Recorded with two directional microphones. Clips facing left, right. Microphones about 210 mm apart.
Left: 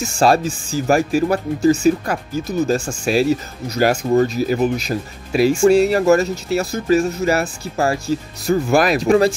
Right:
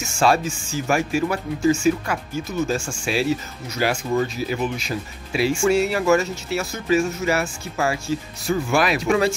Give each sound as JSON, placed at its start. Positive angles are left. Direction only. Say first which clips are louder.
{"t": 0.0, "sound": "speech", "louder": "left 4 dB", "side_deg": 35}